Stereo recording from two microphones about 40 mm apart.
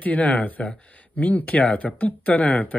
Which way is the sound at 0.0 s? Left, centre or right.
Left.